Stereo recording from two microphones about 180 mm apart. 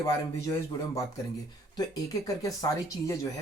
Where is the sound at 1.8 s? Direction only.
20° left (ahead or behind).